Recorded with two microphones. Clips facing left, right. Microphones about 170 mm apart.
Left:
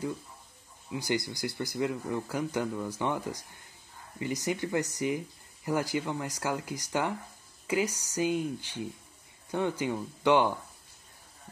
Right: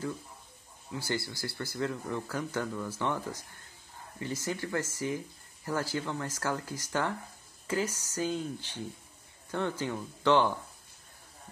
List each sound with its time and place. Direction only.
0.9 s a man's voice: 15° left (ahead or behind)